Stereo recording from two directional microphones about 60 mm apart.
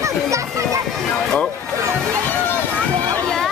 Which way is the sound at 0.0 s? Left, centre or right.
Right.